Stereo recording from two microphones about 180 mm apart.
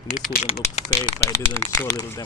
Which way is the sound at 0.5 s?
35° left (ahead or behind).